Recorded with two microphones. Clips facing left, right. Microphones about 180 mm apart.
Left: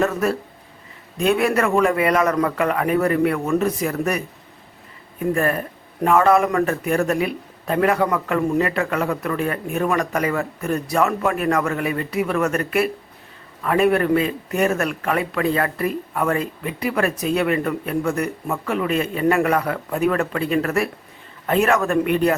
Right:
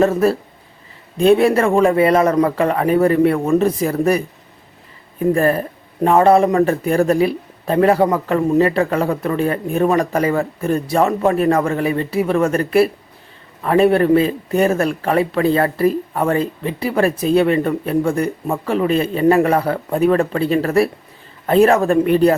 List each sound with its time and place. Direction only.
0.0 s a man's voice: 30° right (ahead or behind)
5.2 s a man's voice: 30° right (ahead or behind)